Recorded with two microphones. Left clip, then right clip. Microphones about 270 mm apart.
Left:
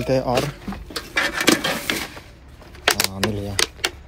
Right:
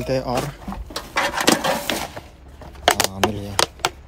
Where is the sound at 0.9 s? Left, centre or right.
Right.